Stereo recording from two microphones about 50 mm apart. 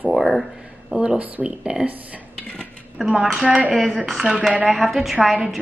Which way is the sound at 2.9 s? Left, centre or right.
Centre.